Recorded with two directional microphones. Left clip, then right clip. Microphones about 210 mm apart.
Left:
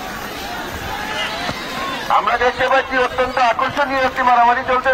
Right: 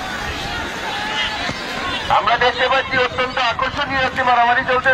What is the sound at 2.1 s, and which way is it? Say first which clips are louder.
A man's voice: even; 50° left (ahead or behind).